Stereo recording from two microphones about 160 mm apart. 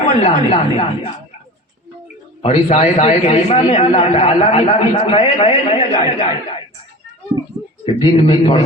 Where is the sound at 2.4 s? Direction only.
40° left (ahead or behind).